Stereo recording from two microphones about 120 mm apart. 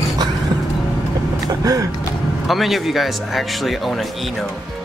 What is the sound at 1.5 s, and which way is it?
Speech, 30° right (ahead or behind).